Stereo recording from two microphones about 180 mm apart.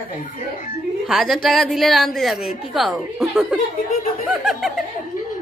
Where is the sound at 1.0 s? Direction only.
Centre (ahead or behind).